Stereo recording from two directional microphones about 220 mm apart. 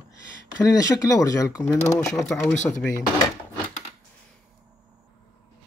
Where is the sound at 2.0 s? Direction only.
Centre (ahead or behind).